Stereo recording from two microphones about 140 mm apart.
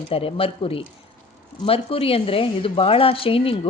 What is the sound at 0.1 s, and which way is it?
A woman's voice, 40° left (ahead or behind).